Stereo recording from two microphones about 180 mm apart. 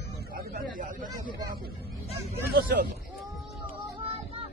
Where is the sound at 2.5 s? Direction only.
55° right (ahead or behind).